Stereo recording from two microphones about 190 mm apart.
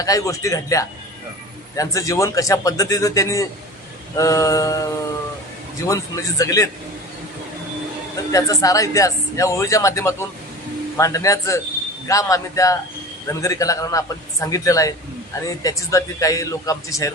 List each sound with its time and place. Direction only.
0.0 s speech: 15° left (ahead or behind)
5.9 s speech: 15° left (ahead or behind)
8.3 s speech: 15° left (ahead or behind)